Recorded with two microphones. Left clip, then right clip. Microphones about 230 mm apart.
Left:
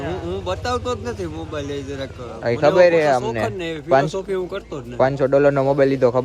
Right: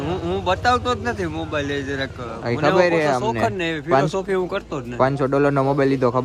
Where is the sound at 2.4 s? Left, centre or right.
Centre.